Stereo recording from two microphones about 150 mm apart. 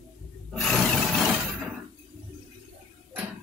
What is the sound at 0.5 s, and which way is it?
Roar, centre (ahead or behind).